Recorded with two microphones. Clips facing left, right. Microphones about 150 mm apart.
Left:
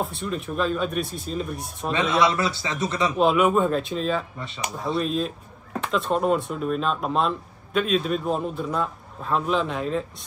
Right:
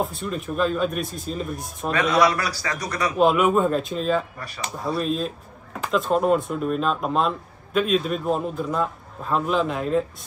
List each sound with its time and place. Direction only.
0.0 s speech: centre (ahead or behind)
2.2 s speech: 25° left (ahead or behind)
3.2 s speech: centre (ahead or behind)